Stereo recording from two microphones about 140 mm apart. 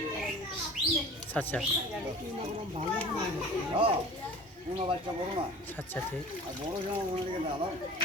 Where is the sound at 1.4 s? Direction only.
5° left (ahead or behind).